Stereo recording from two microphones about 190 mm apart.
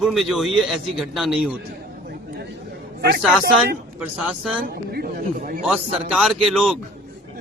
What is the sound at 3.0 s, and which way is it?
Speech, 55° right (ahead or behind).